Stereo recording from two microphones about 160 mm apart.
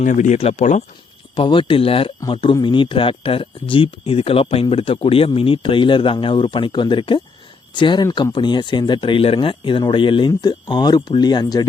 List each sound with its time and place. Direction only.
0.0 s speech: 50° left (ahead or behind)
1.4 s speech: 35° left (ahead or behind)